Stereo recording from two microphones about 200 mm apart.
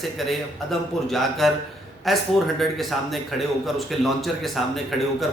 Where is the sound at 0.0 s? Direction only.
Centre (ahead or behind).